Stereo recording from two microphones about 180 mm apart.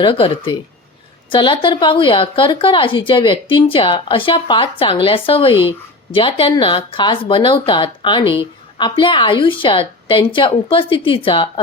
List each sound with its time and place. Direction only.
0.0 s speech: 30° left (ahead or behind)